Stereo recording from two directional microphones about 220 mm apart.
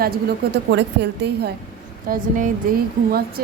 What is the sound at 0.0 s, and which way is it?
A woman's voice, 50° right (ahead or behind).